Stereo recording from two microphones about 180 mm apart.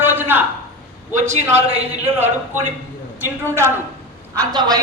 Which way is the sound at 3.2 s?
15° right (ahead or behind).